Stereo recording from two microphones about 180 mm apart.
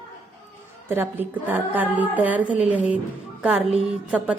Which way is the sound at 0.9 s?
10° right (ahead or behind).